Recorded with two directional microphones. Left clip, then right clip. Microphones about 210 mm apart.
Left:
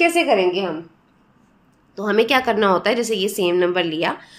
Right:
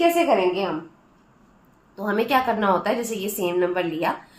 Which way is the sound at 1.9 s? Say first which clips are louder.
Left 4 dB; 50° left (ahead or behind).